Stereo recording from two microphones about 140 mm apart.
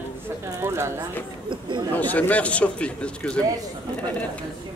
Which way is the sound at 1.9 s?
10° left (ahead or behind).